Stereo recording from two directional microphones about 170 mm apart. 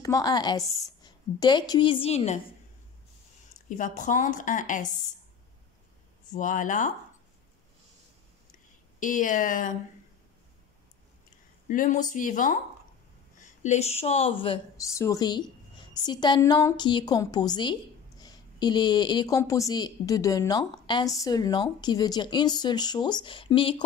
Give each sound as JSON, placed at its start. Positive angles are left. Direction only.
{"t": 0.0, "sound": "a woman's voice", "side_deg": 20}
{"t": 3.5, "sound": "speech", "side_deg": 45}
{"t": 6.3, "sound": "speech", "side_deg": 50}
{"t": 9.0, "sound": "speech", "side_deg": 50}
{"t": 11.6, "sound": "speech", "side_deg": 50}
{"t": 14.9, "sound": "a woman's voice", "side_deg": 20}